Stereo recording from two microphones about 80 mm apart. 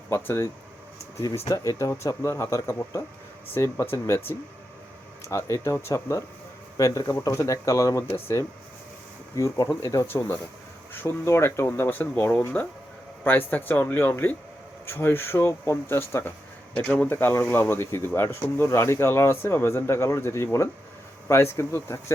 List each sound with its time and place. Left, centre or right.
0.1 s speech: left
1.2 s speech: left
9.3 s speech: left
10.1 s speech: left
16.7 s speech: centre; by 22.0 s left